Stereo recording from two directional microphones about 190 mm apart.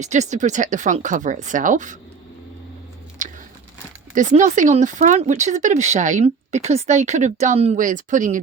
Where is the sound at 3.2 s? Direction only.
45° right (ahead or behind).